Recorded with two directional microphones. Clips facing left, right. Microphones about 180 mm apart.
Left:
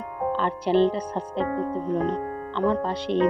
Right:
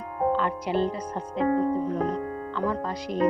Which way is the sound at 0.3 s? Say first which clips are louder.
Left 4 dB; 30° left (ahead or behind).